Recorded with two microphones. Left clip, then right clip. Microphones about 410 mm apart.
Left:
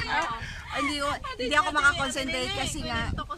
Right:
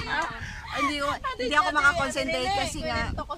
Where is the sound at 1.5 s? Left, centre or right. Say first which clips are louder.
Right 1 dB; centre.